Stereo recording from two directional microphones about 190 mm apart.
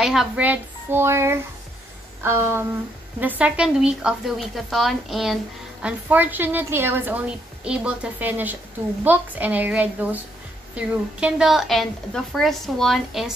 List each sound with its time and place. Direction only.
0.0 s a woman's voice: centre (ahead or behind)